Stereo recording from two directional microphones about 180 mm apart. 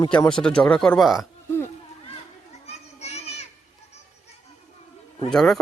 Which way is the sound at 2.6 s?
35° left (ahead or behind).